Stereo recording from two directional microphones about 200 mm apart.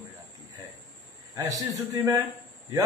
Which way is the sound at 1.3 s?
15° right (ahead or behind).